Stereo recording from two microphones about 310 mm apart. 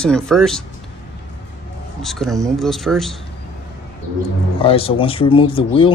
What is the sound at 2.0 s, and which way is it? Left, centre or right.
Speech, centre.